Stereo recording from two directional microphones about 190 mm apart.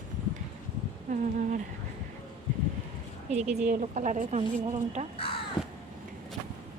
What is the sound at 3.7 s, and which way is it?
A woman's voice, 40° right (ahead or behind).